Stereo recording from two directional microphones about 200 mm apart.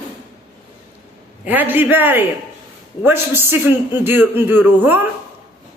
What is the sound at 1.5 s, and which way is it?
A man's voice, 10° right (ahead or behind).